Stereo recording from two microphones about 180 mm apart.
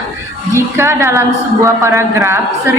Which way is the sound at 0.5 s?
15° right (ahead or behind).